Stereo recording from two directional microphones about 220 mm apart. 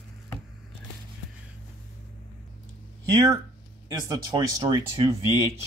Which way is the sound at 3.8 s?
15° right (ahead or behind).